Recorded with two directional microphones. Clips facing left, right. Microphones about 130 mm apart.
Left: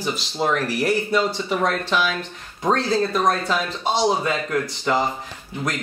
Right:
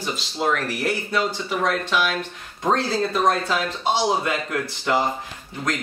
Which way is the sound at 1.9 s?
5° right (ahead or behind).